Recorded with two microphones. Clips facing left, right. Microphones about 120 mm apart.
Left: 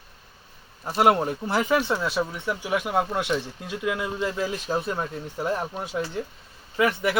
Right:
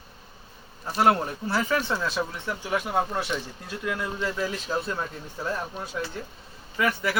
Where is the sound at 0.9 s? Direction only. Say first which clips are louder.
Left 2 dB; 15° left (ahead or behind).